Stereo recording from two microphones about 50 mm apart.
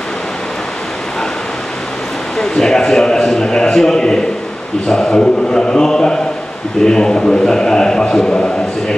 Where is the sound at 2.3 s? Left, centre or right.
Centre.